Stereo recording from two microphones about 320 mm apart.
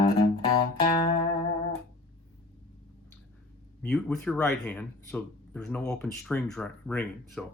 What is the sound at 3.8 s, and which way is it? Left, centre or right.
Speech, centre.